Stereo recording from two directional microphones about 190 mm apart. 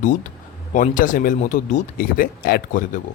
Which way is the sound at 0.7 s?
45° left (ahead or behind).